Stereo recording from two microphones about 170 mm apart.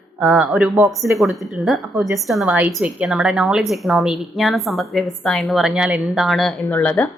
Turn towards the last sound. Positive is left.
turn(degrees=10)  # may be behind; listen again after turning